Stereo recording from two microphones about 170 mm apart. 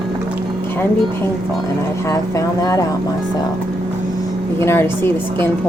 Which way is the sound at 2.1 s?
20° left (ahead or behind).